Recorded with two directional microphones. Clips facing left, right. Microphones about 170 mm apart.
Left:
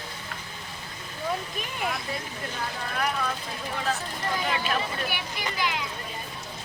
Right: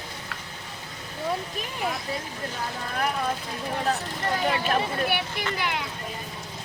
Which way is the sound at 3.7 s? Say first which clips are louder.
Right 3 dB; 40° right (ahead or behind).